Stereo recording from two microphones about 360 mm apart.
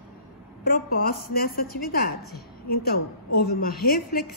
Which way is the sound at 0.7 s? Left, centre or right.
Left.